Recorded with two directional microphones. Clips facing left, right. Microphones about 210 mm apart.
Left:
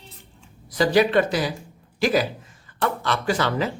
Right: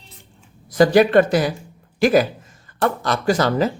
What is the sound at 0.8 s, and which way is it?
Speech, 50° right (ahead or behind).